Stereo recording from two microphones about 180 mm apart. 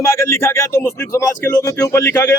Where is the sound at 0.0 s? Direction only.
15° left (ahead or behind).